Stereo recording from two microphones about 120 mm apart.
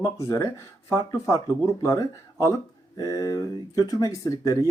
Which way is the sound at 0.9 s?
30° left (ahead or behind).